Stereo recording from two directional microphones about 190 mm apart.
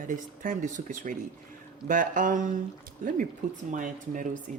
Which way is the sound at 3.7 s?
45° right (ahead or behind).